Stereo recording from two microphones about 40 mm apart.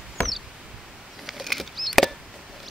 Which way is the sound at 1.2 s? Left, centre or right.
Centre.